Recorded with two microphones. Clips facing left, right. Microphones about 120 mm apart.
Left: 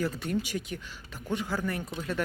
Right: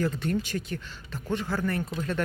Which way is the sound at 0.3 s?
10° left (ahead or behind).